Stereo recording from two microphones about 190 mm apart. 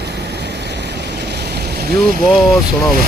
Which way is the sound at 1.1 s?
60° right (ahead or behind).